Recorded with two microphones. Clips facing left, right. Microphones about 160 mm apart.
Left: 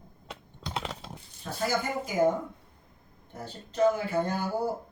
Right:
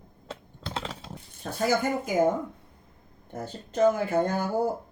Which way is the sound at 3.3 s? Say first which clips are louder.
Right 5 dB; 50° right (ahead or behind).